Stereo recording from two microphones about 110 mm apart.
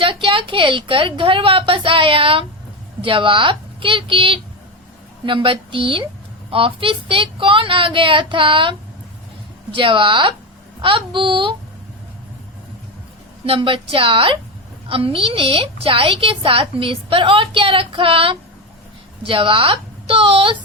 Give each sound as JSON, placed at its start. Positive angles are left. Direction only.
{"t": 0.0, "sound": "a woman's voice", "side_deg": -55}
{"t": 9.7, "sound": "a woman's voice", "side_deg": -50}
{"t": 13.4, "sound": "a woman's voice", "side_deg": -55}